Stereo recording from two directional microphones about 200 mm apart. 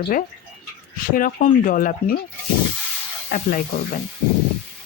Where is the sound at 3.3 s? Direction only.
45° left (ahead or behind).